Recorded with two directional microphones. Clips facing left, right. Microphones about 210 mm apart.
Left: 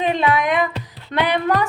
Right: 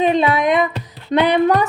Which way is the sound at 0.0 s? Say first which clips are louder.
Right 3 dB; 20° right (ahead or behind).